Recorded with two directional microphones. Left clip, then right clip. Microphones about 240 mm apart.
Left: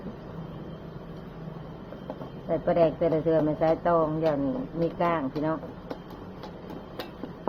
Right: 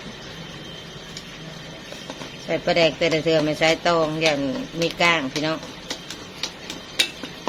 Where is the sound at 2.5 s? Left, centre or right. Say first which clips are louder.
Right 4 dB; right.